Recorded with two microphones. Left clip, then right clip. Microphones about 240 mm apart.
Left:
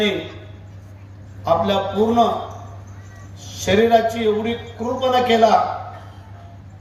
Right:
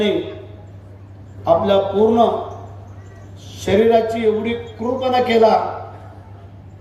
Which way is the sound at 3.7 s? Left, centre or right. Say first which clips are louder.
Right 1 dB; left.